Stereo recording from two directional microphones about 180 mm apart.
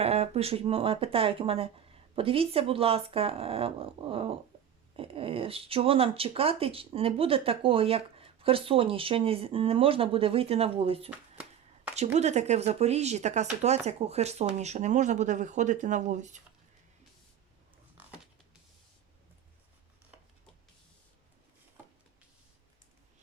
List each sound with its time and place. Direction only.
0.0 s speech: 35° right (ahead or behind)